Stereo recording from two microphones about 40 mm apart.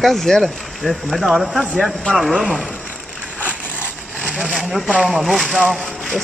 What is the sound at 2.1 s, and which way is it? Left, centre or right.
Speech, left.